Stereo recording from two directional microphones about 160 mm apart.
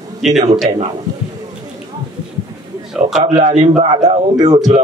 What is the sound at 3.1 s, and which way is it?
Speech, 50° right (ahead or behind).